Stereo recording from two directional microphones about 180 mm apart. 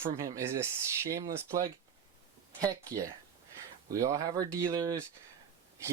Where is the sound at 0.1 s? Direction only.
15° right (ahead or behind).